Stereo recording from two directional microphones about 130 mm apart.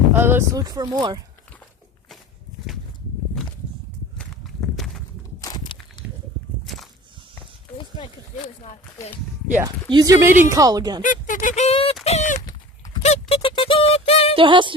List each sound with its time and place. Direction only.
0.1 s boat: 15° right (ahead or behind)
0.5 s speech: 30° right (ahead or behind)
4.2 s walk: centre (ahead or behind)
7.8 s a sound: 40° left (ahead or behind)
9.9 s speech: 30° right (ahead or behind)
11.0 s speech: 90° left; by 11.9 s 50° left (ahead or behind)
12.0 s speech: 65° left (ahead or behind)
12.4 s livestock: 30° left (ahead or behind)
13.0 s music: 55° left (ahead or behind)
14.3 s music: 40° right (ahead or behind)